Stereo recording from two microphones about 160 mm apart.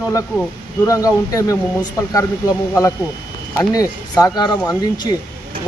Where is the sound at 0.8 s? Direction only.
20° left (ahead or behind).